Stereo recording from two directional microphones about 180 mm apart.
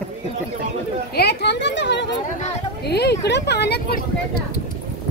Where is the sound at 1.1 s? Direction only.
65° left (ahead or behind).